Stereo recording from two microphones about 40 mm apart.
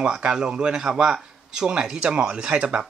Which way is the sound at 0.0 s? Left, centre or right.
Right.